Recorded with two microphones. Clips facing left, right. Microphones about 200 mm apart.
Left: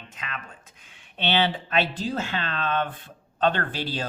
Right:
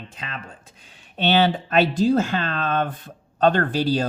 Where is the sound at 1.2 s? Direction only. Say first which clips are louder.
Right 5 dB; 45° right (ahead or behind).